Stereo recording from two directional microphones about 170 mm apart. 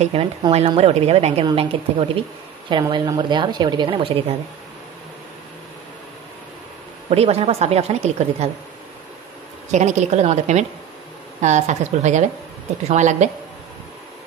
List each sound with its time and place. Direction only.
0.0 s a woman's voice: 35° right (ahead or behind)
7.1 s a woman's voice: 40° right (ahead or behind)
9.7 s a woman's voice: 45° right (ahead or behind)